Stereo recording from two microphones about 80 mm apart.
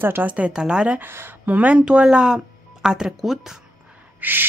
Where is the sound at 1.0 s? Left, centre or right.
Right; by 3.2 s centre.